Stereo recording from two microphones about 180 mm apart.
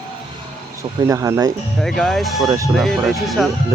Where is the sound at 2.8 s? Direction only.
Centre (ahead or behind).